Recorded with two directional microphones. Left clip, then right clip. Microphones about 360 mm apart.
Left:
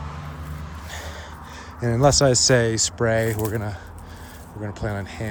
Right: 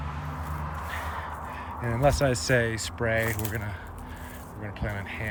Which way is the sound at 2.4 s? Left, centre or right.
Centre.